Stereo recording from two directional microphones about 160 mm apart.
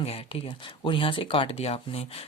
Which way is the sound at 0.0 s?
35° left (ahead or behind).